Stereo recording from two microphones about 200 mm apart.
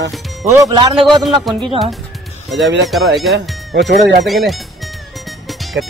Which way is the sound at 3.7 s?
60° right (ahead or behind).